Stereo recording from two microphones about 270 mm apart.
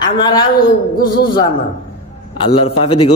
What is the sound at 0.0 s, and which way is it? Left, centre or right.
A woman's voice, centre.